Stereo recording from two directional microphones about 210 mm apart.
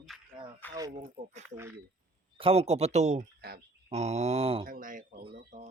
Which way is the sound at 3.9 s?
30° right (ahead or behind).